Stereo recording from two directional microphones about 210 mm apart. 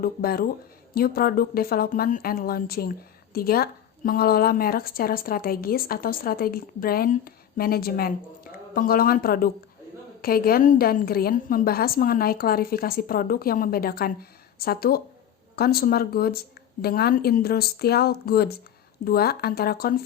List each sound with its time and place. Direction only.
0.0 s a woman's voice: 45° left (ahead or behind)